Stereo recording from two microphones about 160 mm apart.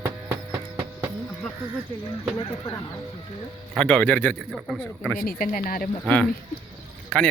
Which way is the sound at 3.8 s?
5° left (ahead or behind).